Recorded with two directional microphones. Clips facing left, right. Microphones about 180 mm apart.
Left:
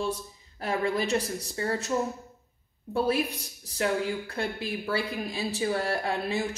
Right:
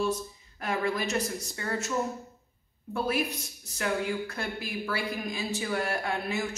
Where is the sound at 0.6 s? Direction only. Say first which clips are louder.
Left 2 dB; 30° left (ahead or behind).